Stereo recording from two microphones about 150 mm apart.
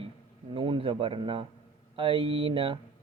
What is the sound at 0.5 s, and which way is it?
A man's voice, 35° right (ahead or behind).